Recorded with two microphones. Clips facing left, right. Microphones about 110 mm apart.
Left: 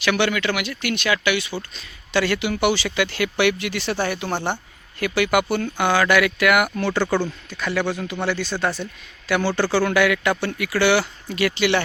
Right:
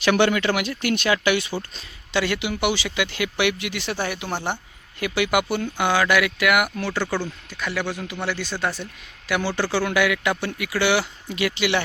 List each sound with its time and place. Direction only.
0.0 s speech: 40° right (ahead or behind)
2.1 s speech: 15° right (ahead or behind)